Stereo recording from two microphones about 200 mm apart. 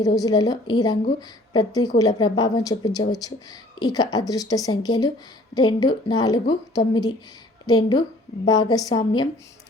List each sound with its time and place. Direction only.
0.0 s a woman's voice: 20° left (ahead or behind)